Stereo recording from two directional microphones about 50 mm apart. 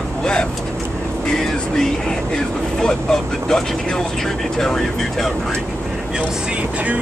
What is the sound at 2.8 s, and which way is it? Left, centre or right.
Speech, centre.